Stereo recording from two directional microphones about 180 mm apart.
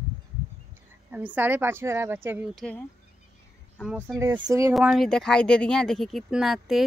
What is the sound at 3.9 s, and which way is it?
Speech, 10° right (ahead or behind).